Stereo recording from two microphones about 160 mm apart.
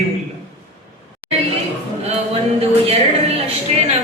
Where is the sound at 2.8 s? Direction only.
40° right (ahead or behind).